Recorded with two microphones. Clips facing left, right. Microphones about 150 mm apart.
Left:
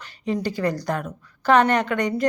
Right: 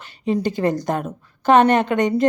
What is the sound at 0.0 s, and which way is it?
A woman's voice, 20° right (ahead or behind).